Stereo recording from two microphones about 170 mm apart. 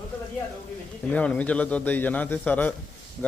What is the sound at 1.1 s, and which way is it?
A man's voice, 10° left (ahead or behind).